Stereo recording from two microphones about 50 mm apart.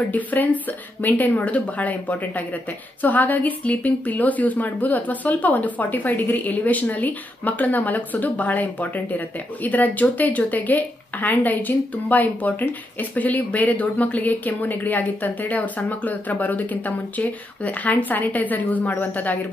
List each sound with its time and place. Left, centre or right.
0.1 s speech: left